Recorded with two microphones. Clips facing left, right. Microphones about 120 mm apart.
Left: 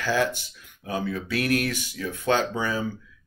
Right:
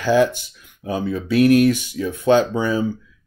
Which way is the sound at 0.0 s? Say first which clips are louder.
Right 8 dB; 20° right (ahead or behind).